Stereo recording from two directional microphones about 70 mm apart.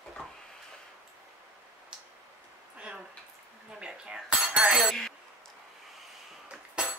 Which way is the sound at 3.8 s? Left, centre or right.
Centre.